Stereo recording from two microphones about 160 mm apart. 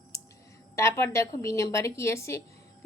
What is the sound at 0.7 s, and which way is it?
A woman's voice, 15° left (ahead or behind).